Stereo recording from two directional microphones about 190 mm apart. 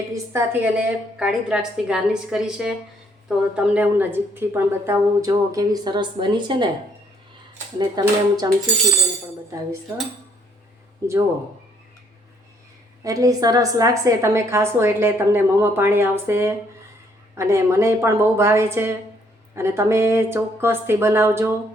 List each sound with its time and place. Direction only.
0.1 s a woman's voice: 10° right (ahead or behind)
7.8 s speech: 20° right (ahead or behind)
11.0 s a woman's voice: 15° right (ahead or behind)
13.1 s a woman's voice: 20° right (ahead or behind)